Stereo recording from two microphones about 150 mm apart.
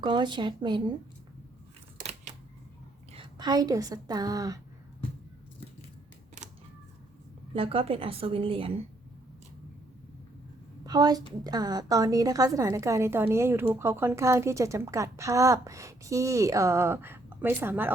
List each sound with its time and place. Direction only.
0.0 s a woman's voice: 30° right (ahead or behind)
3.3 s a woman's voice: 25° right (ahead or behind)
7.5 s a woman's voice: 40° right (ahead or behind)
10.8 s a woman's voice: 25° right (ahead or behind)